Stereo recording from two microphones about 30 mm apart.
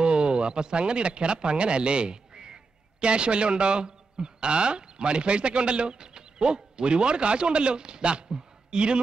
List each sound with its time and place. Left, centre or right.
0.0 s speech: right